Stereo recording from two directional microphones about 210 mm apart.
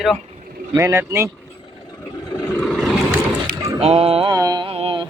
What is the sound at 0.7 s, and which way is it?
Speech, 10° right (ahead or behind).